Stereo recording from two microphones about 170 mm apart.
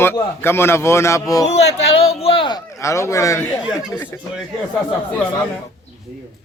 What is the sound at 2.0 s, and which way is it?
Speech, 35° left (ahead or behind).